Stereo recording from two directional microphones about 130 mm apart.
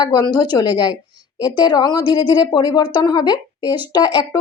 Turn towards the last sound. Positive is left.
turn(degrees=35)  # may be behind; listen again after turning